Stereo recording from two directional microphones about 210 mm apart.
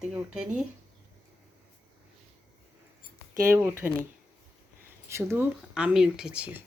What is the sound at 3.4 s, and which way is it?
Speech, 10° right (ahead or behind).